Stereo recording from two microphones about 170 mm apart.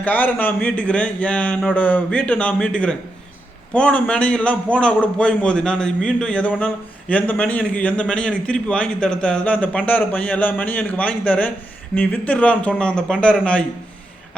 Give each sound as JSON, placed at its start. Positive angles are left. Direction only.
{"t": 0.0, "sound": "a man's voice", "side_deg": 10}